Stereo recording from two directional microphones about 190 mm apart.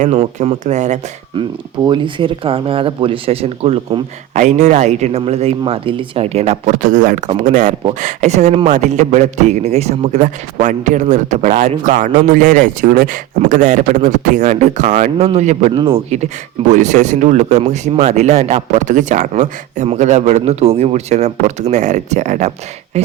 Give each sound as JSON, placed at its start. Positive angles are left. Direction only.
{"t": 0.0, "sound": "speech", "side_deg": -35}
{"t": 1.4, "sound": "speech", "side_deg": -25}
{"t": 15.7, "sound": "speech", "side_deg": -25}